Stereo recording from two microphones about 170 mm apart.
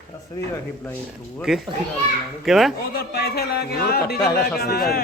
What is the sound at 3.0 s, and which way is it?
A man's voice, 70° left (ahead or behind).